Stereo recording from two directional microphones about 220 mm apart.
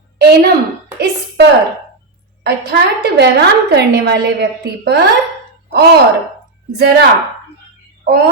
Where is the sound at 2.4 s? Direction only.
50° right (ahead or behind).